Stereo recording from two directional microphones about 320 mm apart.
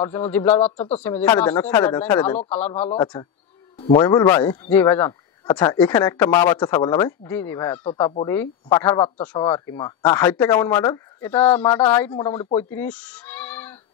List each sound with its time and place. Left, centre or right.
0.0 s speech: centre
0.7 s speech: centre
1.0 s speech: centre
12.7 s a sound: centre